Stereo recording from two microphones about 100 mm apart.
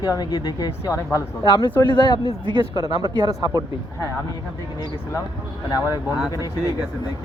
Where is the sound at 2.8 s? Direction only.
40° right (ahead or behind).